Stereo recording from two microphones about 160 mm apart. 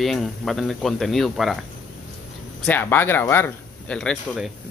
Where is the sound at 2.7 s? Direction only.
15° left (ahead or behind).